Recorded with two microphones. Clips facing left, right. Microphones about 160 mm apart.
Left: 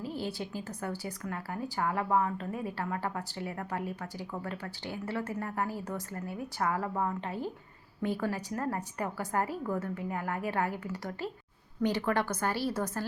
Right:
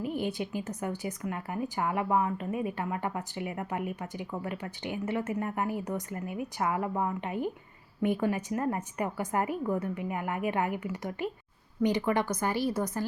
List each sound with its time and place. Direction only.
0.0 s a woman's voice: 20° right (ahead or behind)